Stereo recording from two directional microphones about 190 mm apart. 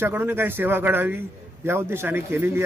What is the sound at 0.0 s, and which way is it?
A man's voice, 10° right (ahead or behind).